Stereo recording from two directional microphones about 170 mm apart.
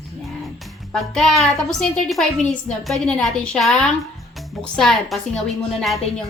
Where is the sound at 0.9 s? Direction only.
5° left (ahead or behind).